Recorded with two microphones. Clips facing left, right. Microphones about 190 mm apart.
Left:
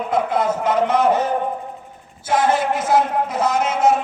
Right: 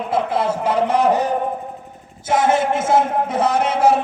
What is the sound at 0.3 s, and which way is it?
Speech, 30° right (ahead or behind).